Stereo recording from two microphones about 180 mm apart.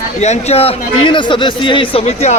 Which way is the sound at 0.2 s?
35° left (ahead or behind).